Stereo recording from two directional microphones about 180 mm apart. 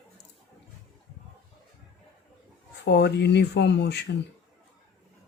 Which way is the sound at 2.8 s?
70° left (ahead or behind).